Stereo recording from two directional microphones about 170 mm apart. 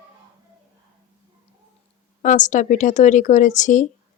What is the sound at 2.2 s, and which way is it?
Speech, 50° left (ahead or behind).